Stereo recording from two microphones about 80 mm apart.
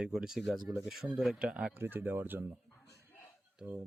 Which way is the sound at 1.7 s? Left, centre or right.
Right.